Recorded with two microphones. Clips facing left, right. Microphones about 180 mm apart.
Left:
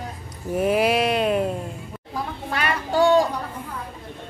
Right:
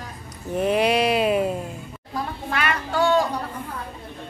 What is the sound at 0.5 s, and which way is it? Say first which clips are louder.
Bleat: even; 5° left (ahead or behind).